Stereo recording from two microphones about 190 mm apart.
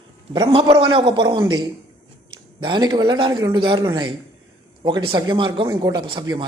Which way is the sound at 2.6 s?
25° right (ahead or behind).